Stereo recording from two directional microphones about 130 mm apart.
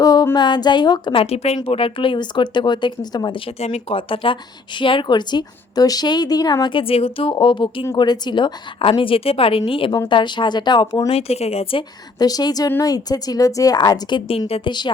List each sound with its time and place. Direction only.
0.0 s a sound: 30° left (ahead or behind)
0.3 s a woman's voice: 35° left (ahead or behind)
11.1 s a woman's voice: 50° left (ahead or behind)
12.2 s a woman's voice: 30° left (ahead or behind)
14.3 s a woman's voice: 50° left (ahead or behind)
14.7 s a woman's voice: 35° left (ahead or behind)